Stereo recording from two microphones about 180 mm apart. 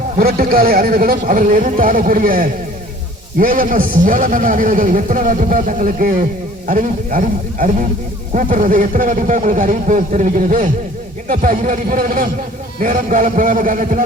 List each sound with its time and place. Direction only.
0.2 s a man's voice: 55° right (ahead or behind)